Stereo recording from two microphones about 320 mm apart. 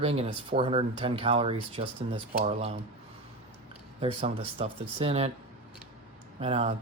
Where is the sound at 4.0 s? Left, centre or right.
Centre.